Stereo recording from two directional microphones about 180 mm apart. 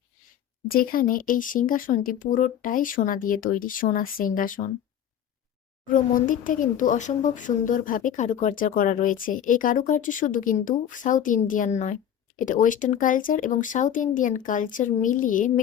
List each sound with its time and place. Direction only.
0.7 s speech: 55° left (ahead or behind)
5.9 s speech: 50° left (ahead or behind)